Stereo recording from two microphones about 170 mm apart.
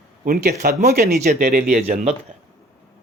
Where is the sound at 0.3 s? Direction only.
60° right (ahead or behind).